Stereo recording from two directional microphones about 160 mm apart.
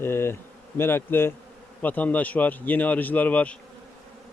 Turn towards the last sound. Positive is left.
turn(degrees=10)  # may be behind; listen again after turning